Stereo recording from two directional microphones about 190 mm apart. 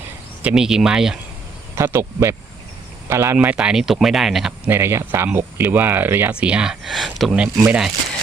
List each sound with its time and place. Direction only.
0.4 s speech: 5° right (ahead or behind)